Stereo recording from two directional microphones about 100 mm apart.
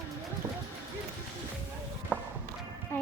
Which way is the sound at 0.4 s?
25° right (ahead or behind).